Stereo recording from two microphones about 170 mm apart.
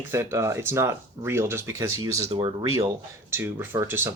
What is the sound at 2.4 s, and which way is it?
Speech, 30° right (ahead or behind).